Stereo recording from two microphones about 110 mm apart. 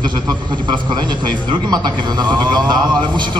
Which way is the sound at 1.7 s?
40° right (ahead or behind).